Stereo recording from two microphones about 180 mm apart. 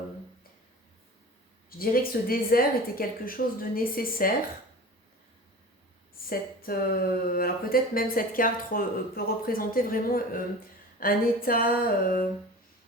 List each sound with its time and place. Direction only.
1.8 s speech: 55° left (ahead or behind)
6.2 s speech: 55° left (ahead or behind)